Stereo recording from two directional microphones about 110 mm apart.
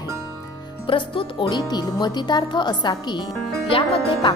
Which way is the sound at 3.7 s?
55° left (ahead or behind).